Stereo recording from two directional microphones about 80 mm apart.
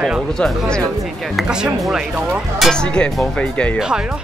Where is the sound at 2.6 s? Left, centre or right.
Centre.